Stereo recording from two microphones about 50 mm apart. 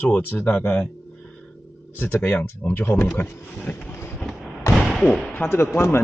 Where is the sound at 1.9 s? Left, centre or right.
Left.